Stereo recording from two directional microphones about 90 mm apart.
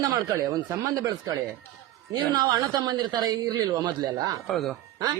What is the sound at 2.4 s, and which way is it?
Speech, 45° right (ahead or behind).